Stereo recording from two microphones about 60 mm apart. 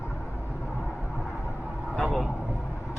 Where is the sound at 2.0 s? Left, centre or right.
Centre.